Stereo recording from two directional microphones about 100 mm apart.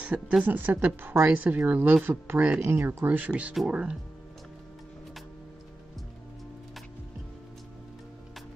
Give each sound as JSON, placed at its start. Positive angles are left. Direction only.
{"t": 0.0, "sound": "a woman's voice", "side_deg": -15}
{"t": 3.1, "sound": "a woman's voice", "side_deg": -15}